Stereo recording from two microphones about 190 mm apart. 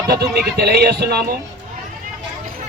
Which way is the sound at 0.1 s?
55° right (ahead or behind).